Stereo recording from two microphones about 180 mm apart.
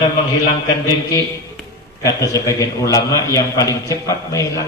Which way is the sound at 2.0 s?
15° left (ahead or behind).